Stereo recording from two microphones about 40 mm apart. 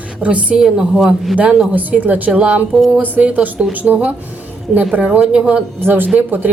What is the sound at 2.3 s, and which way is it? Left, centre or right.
A woman's voice, right.